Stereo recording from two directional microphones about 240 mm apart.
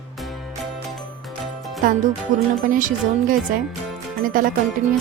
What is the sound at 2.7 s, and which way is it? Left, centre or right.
Speech, right.